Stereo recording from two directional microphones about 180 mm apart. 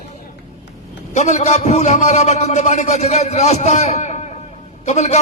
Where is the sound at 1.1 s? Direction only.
40° left (ahead or behind).